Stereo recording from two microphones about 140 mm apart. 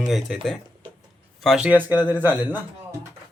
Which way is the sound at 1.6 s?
10° right (ahead or behind).